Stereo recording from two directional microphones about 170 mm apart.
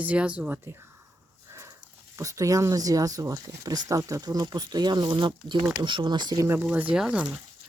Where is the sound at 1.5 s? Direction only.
15° right (ahead or behind).